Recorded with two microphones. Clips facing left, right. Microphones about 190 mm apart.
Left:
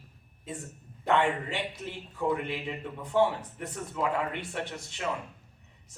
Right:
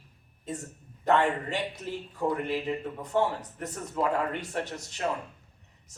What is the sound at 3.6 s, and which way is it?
Speech, 40° right (ahead or behind).